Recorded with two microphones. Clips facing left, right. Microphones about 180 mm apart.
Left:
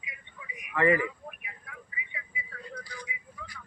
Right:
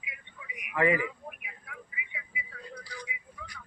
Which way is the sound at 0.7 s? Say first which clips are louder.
Left 2 dB; 10° right (ahead or behind).